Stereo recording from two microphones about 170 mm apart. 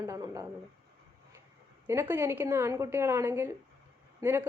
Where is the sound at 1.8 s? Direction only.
15° right (ahead or behind).